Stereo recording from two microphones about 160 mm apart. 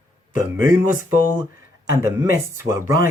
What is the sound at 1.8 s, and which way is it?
Speech, 20° right (ahead or behind).